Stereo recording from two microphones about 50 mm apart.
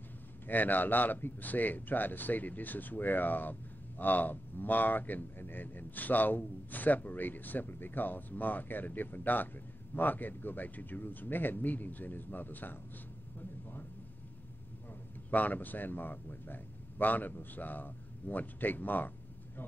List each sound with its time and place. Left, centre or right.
0.5 s speech: left
13.4 s a sound: left
15.3 s a man's voice: left